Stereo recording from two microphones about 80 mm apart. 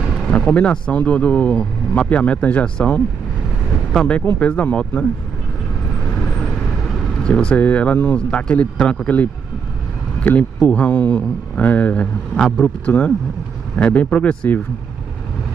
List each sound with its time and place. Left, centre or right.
0.3 s speech: centre
7.2 s speech: centre
10.6 s speech: centre